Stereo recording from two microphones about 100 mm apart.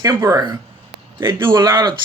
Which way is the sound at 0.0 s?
35° right (ahead or behind).